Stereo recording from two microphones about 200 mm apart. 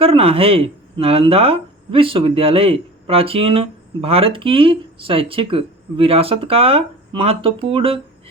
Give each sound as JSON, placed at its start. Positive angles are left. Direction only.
{"t": 0.0, "sound": "speech", "side_deg": -30}